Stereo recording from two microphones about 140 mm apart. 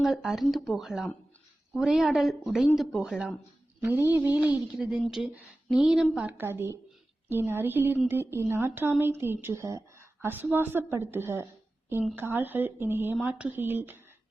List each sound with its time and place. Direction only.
0.0 s speech: centre (ahead or behind)
3.8 s a woman's voice: 15° right (ahead or behind)